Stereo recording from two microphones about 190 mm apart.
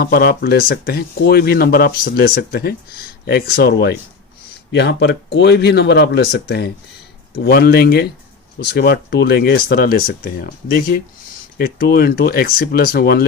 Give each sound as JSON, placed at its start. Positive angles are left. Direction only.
{"t": 0.0, "sound": "speech", "side_deg": 55}